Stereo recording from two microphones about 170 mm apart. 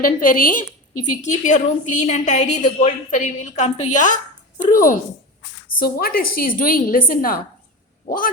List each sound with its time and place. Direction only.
0.0 s a woman's voice: 55° left (ahead or behind)
5.8 s a woman's voice: 60° left (ahead or behind)
8.0 s a sound: 55° left (ahead or behind)